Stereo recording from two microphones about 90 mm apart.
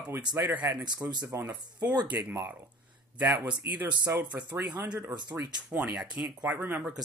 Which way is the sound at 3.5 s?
15° right (ahead or behind).